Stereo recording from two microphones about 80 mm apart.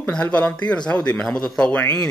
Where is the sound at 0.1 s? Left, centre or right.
Centre.